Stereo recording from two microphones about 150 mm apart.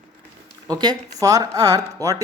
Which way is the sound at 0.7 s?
25° right (ahead or behind).